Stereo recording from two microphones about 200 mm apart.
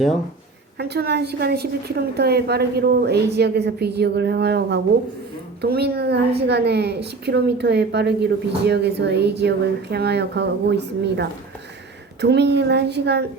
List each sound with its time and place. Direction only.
0.8 s a woman's voice: 55° right (ahead or behind)